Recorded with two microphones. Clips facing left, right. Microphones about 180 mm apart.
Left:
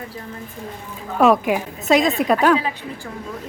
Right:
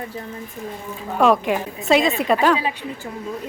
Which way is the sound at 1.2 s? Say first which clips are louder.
Left 1 dB; 5° left (ahead or behind).